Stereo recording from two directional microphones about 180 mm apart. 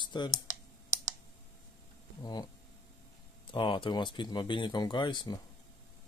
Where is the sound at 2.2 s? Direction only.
20° left (ahead or behind).